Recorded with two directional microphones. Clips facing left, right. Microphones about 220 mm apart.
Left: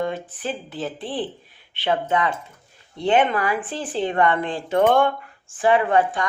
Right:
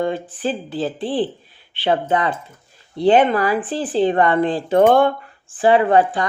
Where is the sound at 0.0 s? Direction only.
30° right (ahead or behind).